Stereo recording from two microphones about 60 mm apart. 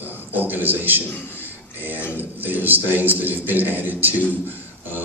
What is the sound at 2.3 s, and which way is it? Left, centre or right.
A man's voice, right.